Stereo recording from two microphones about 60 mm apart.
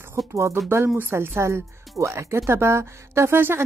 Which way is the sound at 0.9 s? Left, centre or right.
Right.